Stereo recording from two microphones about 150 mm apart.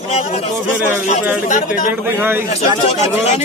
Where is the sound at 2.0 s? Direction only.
15° right (ahead or behind).